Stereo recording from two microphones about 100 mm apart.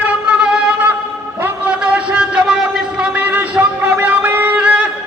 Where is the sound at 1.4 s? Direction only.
15° right (ahead or behind).